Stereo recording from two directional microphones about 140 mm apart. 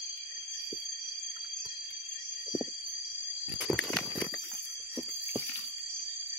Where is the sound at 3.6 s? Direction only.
Centre (ahead or behind).